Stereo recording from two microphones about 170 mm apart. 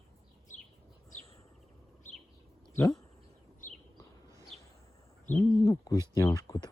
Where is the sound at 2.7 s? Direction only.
20° left (ahead or behind).